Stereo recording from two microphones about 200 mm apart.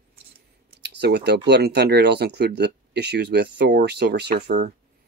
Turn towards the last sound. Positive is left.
turn(degrees=-55)  # may be behind; listen again after turning